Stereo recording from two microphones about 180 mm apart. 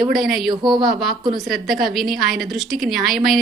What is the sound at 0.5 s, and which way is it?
Speech, 25° right (ahead or behind).